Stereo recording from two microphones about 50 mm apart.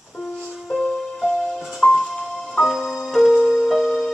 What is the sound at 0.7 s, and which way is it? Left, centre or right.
Music, centre.